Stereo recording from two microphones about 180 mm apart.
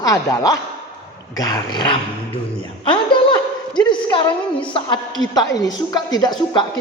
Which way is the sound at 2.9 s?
25° left (ahead or behind).